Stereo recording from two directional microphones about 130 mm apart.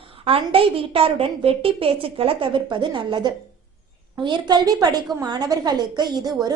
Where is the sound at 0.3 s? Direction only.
45° right (ahead or behind).